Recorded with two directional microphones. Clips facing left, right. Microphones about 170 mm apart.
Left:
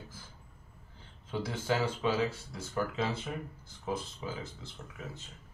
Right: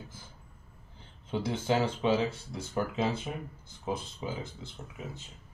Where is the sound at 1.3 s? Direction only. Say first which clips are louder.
Right 3 dB; 20° right (ahead or behind).